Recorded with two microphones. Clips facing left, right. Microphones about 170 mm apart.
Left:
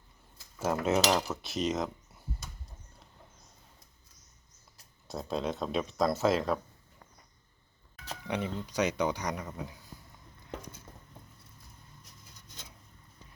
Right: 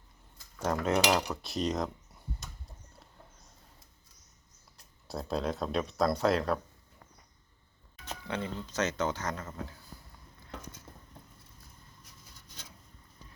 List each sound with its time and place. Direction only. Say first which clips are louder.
0.6 s speech: left 1 dB; 5° left (ahead or behind)
5.0 s speech: even; centre (ahead or behind)
8.3 s speech: left 2 dB; 15° left (ahead or behind)